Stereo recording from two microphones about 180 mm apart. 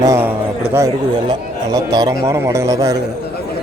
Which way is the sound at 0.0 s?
15° right (ahead or behind).